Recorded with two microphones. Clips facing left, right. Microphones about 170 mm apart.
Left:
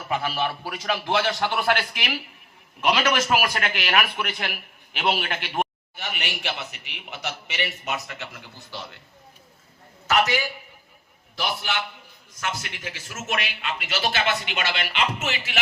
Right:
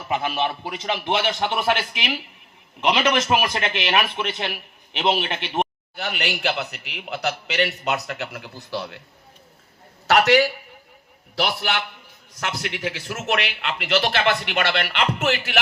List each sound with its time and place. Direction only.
0.1 s a man's voice: 20° right (ahead or behind)
6.0 s a man's voice: 65° right (ahead or behind)
10.1 s a man's voice: 70° right (ahead or behind)